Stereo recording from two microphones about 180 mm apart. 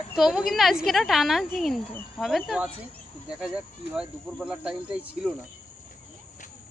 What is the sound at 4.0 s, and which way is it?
Speech, 5° right (ahead or behind).